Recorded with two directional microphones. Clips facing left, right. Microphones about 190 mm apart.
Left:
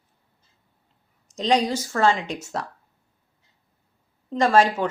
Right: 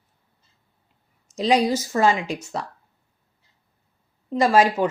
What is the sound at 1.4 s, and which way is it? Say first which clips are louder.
A woman's voice: right 2 dB; 10° right (ahead or behind).